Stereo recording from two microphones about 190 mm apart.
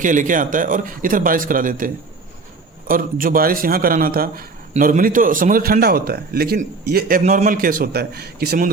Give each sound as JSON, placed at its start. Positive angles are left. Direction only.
{"t": 0.0, "sound": "a man's voice", "side_deg": -45}